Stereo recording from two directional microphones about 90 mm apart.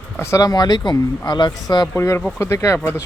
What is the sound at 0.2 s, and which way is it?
Speech, 30° left (ahead or behind).